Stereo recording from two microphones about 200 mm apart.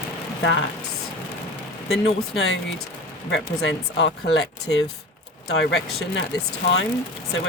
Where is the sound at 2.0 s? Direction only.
55° left (ahead or behind).